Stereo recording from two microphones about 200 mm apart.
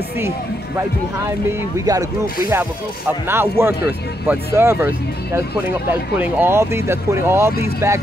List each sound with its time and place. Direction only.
1.9 s speech: 20° right (ahead or behind)
3.3 s speech: 10° right (ahead or behind)